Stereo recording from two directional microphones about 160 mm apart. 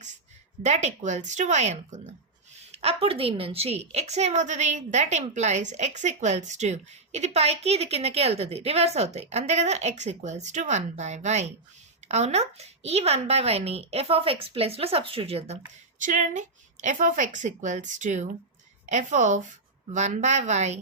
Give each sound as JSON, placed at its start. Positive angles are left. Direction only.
{"t": 0.6, "sound": "a woman's voice", "side_deg": -45}
{"t": 16.0, "sound": "a woman's voice", "side_deg": -50}